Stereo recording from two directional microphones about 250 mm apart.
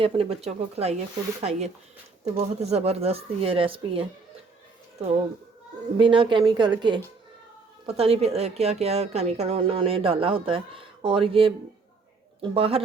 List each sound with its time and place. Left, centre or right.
0.0 s a woman's voice: right
6.0 s a woman's voice: centre